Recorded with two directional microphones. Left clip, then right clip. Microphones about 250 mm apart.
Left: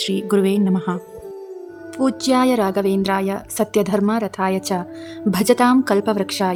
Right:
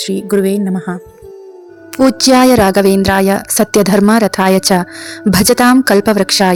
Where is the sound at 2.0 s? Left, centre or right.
Centre.